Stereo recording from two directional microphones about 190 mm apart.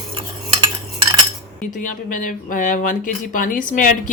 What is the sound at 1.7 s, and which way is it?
Speech, 45° left (ahead or behind).